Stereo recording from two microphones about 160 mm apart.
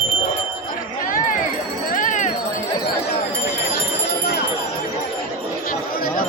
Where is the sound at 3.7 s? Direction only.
80° left.